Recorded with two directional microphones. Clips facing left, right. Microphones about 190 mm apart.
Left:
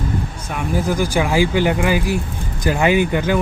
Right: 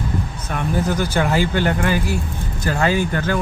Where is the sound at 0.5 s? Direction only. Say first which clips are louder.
Even; 10° left (ahead or behind).